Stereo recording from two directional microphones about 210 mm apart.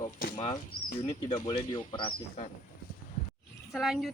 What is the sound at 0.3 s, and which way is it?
Speech, 20° left (ahead or behind).